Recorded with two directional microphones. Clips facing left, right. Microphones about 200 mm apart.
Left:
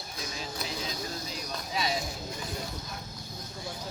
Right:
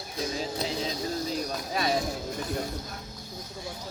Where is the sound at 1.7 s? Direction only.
50° right (ahead or behind).